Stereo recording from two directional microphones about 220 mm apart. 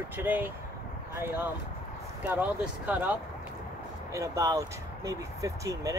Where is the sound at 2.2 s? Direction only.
5° right (ahead or behind).